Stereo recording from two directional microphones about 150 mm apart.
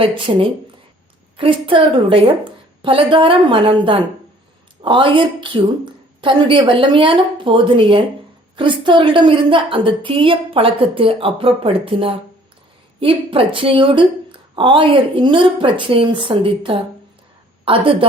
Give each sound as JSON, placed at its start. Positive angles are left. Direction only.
{"t": 0.0, "sound": "a woman's voice", "side_deg": -35}